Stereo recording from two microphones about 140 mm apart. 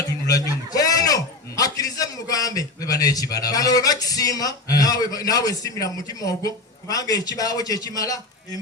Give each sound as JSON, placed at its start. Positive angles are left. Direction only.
{"t": 0.7, "sound": "a man's voice", "side_deg": 25}